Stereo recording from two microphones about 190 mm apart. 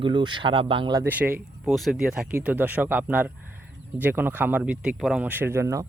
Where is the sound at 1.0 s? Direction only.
10° right (ahead or behind).